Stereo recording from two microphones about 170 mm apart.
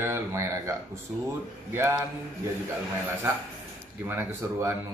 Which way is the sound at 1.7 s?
15° right (ahead or behind).